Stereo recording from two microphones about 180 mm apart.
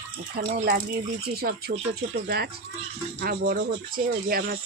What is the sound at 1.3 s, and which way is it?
Speech, 60° right (ahead or behind).